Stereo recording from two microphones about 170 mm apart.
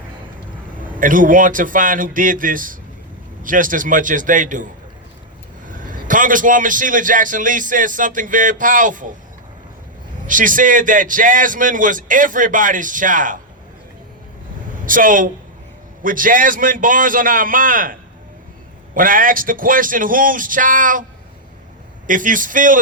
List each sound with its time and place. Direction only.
0.9 s a man's voice: 50° right (ahead or behind)
10.2 s a man's voice: 50° right (ahead or behind)
14.8 s a man's voice: 50° right (ahead or behind)
18.9 s a man's voice: 55° right (ahead or behind)
22.0 s a man's voice: 50° right (ahead or behind)